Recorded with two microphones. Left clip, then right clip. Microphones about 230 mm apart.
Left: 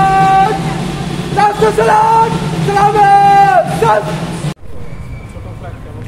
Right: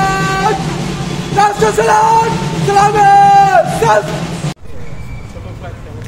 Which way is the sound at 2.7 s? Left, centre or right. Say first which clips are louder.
Even; right.